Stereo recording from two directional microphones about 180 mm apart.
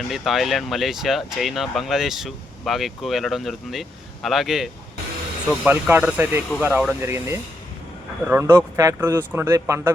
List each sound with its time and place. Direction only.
0.1 s speech: centre (ahead or behind)